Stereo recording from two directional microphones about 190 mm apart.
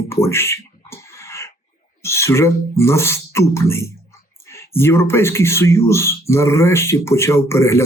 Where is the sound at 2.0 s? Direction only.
15° left (ahead or behind).